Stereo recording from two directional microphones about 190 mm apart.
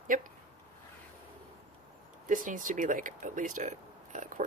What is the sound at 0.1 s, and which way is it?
Speech, 45° right (ahead or behind).